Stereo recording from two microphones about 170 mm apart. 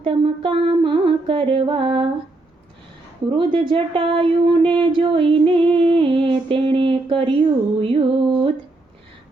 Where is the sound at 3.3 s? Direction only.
30° right (ahead or behind).